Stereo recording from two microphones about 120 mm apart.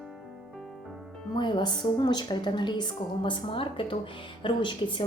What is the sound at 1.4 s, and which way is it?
A woman's voice, 40° left (ahead or behind).